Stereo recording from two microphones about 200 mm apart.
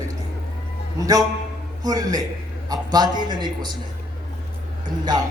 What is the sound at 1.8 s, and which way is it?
A man's voice, 20° right (ahead or behind).